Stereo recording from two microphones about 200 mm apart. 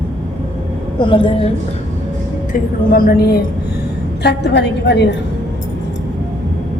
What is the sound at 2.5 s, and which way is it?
A woman's voice, 45° left (ahead or behind).